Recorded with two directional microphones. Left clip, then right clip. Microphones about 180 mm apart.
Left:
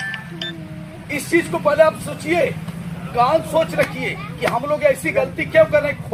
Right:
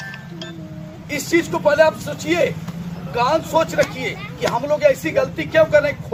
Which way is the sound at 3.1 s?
15° right (ahead or behind).